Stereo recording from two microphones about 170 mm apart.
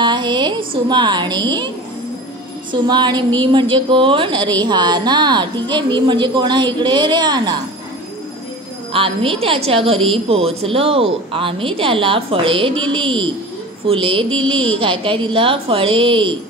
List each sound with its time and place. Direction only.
0.0 s a woman's voice: 25° right (ahead or behind)
2.7 s a woman's voice: 25° right (ahead or behind)
8.9 s a woman's voice: 30° right (ahead or behind)